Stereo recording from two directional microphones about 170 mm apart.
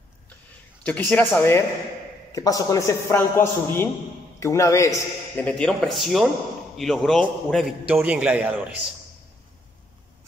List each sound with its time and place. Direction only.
0.8 s a man's voice: 10° left (ahead or behind)
5.5 s a man's voice: 5° left (ahead or behind)